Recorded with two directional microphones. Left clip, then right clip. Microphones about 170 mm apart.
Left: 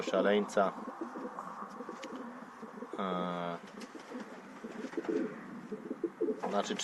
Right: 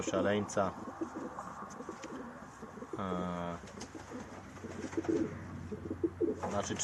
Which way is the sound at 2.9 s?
30° left (ahead or behind).